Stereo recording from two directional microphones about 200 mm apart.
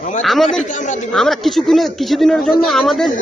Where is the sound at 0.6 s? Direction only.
35° left (ahead or behind).